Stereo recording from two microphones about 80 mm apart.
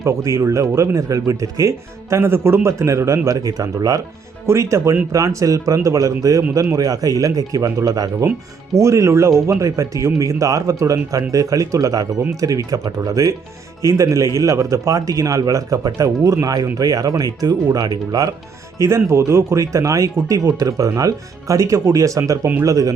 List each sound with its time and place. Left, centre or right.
0.0 s speech: right
4.4 s speech: right
8.7 s speech: right
18.8 s speech: right